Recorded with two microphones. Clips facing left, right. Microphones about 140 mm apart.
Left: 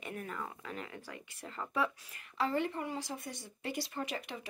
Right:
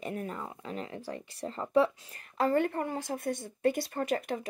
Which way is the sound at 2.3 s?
50° right (ahead or behind).